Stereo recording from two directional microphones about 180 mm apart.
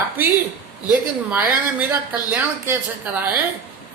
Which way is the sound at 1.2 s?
10° right (ahead or behind).